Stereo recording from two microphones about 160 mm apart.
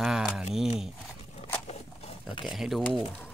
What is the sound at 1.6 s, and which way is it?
Dog, 40° left (ahead or behind).